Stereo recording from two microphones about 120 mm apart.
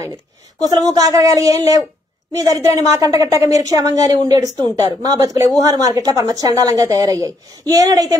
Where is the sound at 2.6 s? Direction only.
30° right (ahead or behind).